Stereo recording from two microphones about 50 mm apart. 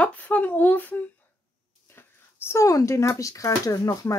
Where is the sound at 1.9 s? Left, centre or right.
Left.